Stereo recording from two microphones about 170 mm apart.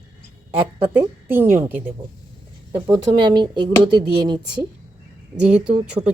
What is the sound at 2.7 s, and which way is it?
Speech, 25° right (ahead or behind).